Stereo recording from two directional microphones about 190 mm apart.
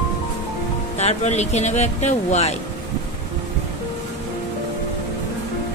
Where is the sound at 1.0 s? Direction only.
35° left (ahead or behind).